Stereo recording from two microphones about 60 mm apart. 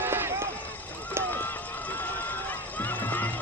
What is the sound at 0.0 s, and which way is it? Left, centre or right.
Run, right.